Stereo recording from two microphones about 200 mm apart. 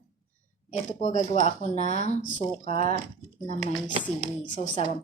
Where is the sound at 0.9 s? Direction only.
35° left (ahead or behind).